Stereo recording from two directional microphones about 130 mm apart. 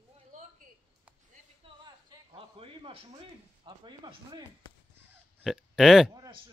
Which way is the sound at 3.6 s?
35° right (ahead or behind).